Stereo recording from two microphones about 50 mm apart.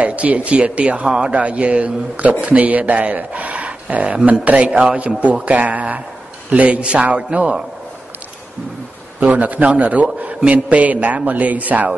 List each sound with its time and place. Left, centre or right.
0.0 s speech: right
9.2 s a man's voice: right